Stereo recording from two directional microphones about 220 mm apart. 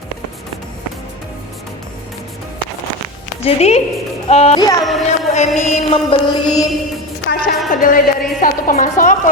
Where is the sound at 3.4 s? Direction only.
30° left (ahead or behind).